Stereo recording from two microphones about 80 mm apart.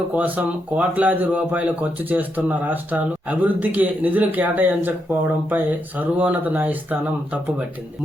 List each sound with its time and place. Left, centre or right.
0.2 s speech: centre